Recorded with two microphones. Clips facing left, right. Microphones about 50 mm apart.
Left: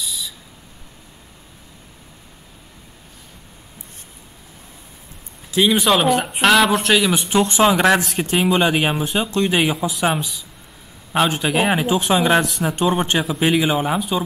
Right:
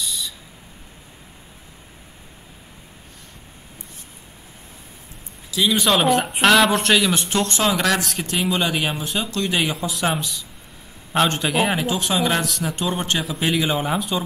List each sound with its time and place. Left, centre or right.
0.0 s owl: centre
5.5 s speech: left
5.8 s speech: centre; by 9.6 s left
9.6 s speech: centre